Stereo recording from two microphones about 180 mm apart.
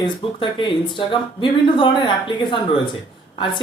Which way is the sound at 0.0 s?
25° left (ahead or behind).